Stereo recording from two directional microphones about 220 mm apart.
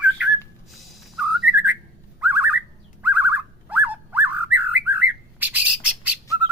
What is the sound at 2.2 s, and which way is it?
Car alarm, 10° right (ahead or behind).